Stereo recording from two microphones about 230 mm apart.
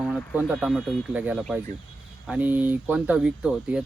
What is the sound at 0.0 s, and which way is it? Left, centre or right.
Speech, centre.